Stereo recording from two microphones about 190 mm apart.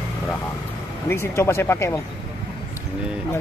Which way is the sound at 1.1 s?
15° left (ahead or behind).